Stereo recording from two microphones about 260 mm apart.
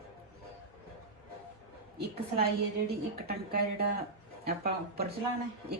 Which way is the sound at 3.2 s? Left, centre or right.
Right.